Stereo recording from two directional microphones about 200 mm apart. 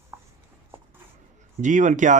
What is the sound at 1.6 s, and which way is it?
Speech, 40° right (ahead or behind).